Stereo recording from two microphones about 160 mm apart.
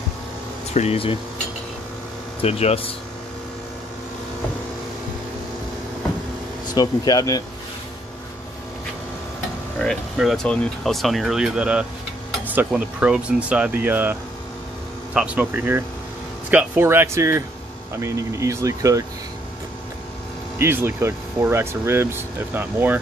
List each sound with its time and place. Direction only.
0.7 s speech: 40° left (ahead or behind)
2.4 s speech: 40° left (ahead or behind)
6.7 s speech: 25° left (ahead or behind)
9.8 s speech: centre (ahead or behind)
15.1 s speech: 10° right (ahead or behind)
20.5 s speech: 15° right (ahead or behind)